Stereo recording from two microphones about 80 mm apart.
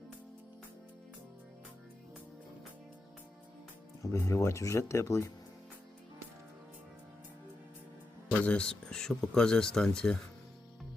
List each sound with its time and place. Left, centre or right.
4.0 s speech: left
8.3 s speech: centre